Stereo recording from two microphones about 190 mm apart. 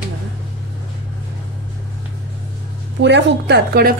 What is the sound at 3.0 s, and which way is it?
Speech, 65° right (ahead or behind).